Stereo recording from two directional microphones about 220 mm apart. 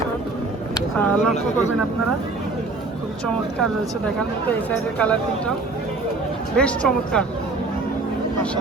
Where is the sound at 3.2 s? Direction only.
5° left (ahead or behind).